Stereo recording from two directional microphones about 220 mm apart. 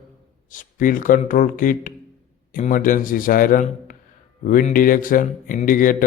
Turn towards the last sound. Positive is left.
turn(degrees=40)  # may be behind; listen again after turning